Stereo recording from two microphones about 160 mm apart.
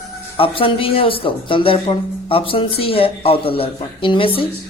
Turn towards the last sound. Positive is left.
turn(degrees=35)  # may be behind; listen again after turning